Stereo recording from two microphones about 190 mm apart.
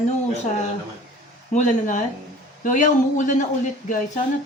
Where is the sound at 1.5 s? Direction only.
40° left (ahead or behind).